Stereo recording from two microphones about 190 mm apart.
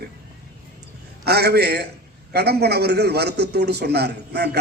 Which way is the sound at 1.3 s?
60° right (ahead or behind).